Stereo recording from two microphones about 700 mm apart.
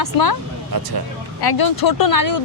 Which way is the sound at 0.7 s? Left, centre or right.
Right.